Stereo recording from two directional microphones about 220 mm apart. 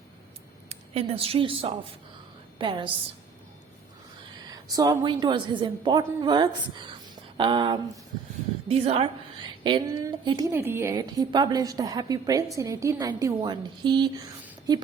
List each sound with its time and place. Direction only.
0.7 s a woman's voice: 25° right (ahead or behind)
4.5 s a woman's voice: 15° right (ahead or behind)